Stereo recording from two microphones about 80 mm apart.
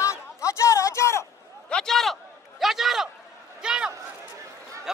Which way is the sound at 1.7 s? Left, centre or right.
Centre.